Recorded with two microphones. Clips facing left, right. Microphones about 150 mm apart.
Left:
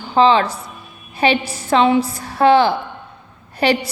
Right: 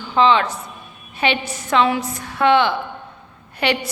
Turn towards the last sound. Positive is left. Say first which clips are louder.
# left 4 dB
turn(degrees=35)  # may be behind; listen again after turning